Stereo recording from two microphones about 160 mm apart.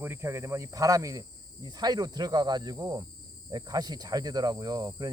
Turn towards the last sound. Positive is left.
turn(degrees=-25)  # may be behind; listen again after turning